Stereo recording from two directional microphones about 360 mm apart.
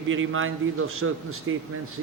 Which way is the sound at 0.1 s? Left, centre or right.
Right.